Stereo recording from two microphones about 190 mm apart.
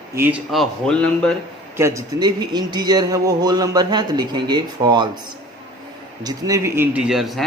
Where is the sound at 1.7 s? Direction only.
15° right (ahead or behind).